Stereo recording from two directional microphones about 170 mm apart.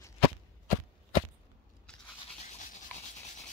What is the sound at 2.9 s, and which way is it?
Rub, 10° left (ahead or behind).